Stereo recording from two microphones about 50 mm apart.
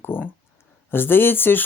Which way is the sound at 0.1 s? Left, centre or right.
Left.